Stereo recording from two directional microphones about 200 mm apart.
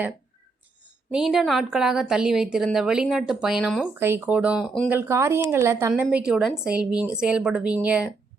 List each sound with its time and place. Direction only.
1.1 s a woman's voice: centre (ahead or behind)
4.9 s a woman's voice: 10° right (ahead or behind)